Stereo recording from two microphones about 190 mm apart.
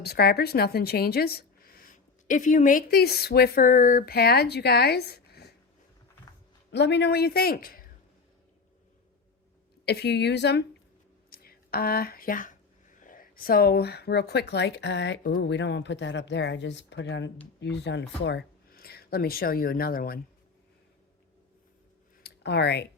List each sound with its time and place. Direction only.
0.0 s a woman's voice: 55° left (ahead or behind)
6.7 s speech: 65° left (ahead or behind)
9.8 s speech: 60° left (ahead or behind)
11.3 s speech: 50° left (ahead or behind)
22.2 s a sound: 60° left (ahead or behind)